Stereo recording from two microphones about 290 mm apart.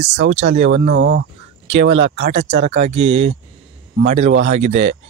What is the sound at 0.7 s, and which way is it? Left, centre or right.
Speech, right.